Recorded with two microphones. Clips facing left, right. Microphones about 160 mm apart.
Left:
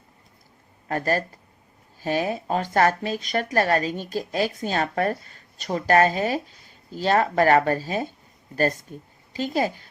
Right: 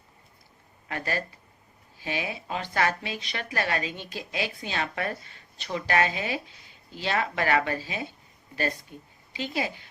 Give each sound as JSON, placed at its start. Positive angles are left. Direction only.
{"t": 0.9, "sound": "a woman's voice", "side_deg": 45}